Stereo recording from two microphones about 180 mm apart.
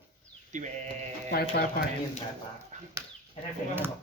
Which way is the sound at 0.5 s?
40° right (ahead or behind).